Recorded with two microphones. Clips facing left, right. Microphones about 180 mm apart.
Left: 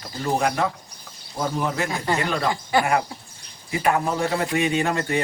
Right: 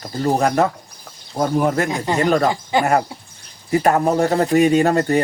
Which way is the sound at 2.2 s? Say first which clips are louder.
Right 12 dB; 45° right (ahead or behind).